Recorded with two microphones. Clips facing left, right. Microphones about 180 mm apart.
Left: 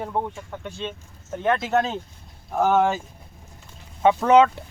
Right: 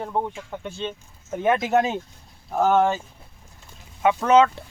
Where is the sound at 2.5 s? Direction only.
Centre (ahead or behind).